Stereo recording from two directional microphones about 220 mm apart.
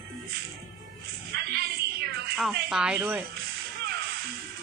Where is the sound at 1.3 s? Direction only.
45° right (ahead or behind).